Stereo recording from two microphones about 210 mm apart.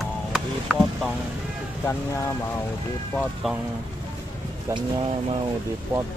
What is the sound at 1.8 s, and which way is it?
Speech, 15° left (ahead or behind).